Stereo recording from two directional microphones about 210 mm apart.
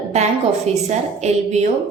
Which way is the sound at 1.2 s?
35° right (ahead or behind).